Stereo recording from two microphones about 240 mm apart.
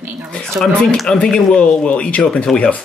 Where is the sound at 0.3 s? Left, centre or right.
Centre.